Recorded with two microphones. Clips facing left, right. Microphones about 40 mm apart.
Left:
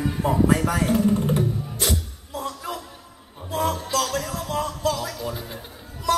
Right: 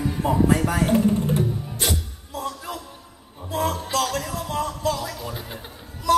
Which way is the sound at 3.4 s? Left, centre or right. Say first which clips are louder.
Even; centre.